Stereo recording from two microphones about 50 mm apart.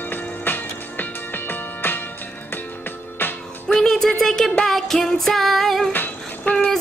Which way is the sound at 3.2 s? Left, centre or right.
Left.